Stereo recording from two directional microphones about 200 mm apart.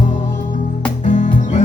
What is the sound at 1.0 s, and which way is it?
Music, 40° left (ahead or behind).